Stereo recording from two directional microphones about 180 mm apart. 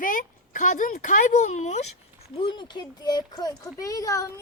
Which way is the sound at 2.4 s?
25° left (ahead or behind).